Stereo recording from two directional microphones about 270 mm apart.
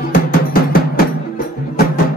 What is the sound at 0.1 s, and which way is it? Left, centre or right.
Music, left.